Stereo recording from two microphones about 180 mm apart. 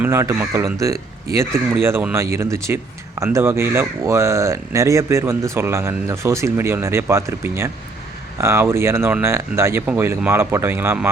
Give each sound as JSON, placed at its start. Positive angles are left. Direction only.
{"t": 0.0, "sound": "speech", "side_deg": -15}